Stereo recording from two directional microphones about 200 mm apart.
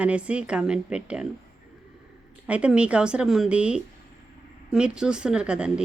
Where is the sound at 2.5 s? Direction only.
5° right (ahead or behind).